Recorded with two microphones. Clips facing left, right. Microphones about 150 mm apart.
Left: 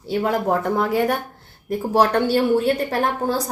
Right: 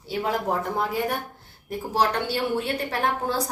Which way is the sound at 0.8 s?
65° left (ahead or behind).